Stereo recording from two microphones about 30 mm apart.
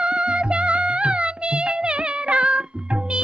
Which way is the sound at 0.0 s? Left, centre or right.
Right.